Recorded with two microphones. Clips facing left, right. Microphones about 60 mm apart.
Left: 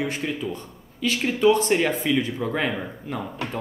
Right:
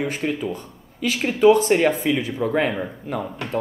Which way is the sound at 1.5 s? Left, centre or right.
Centre.